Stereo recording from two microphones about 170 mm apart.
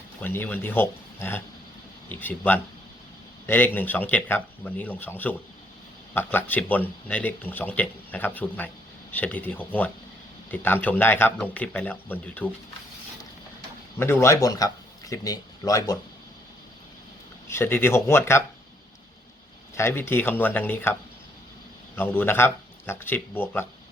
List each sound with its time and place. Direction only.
0.2 s speech: 10° left (ahead or behind)
14.0 s speech: 15° left (ahead or behind)
17.5 s speech: 15° left (ahead or behind)
19.7 s speech: 15° left (ahead or behind)
21.9 s speech: 10° left (ahead or behind)